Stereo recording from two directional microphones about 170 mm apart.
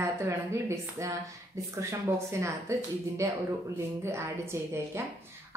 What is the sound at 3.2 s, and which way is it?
A woman's voice, 20° right (ahead or behind).